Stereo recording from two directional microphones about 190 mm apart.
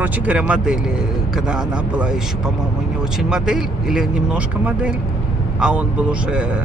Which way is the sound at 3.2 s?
5° right (ahead or behind).